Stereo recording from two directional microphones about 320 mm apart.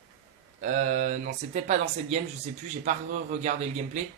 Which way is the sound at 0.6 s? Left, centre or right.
Right.